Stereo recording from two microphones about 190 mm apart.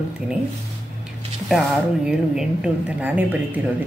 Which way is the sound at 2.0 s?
5° right (ahead or behind).